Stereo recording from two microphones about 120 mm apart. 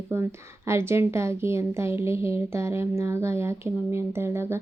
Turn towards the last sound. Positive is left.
turn(degrees=-20)  # may be behind; listen again after turning